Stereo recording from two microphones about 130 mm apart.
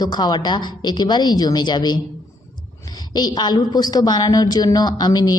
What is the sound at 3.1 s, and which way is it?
A woman's voice, 30° left (ahead or behind).